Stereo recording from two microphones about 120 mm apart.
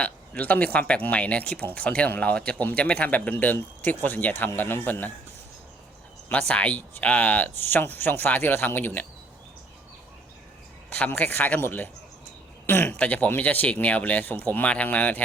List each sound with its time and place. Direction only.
0.0 s speech: 10° left (ahead or behind)
6.5 s speech: 10° left (ahead or behind)
10.9 s speech: 15° left (ahead or behind)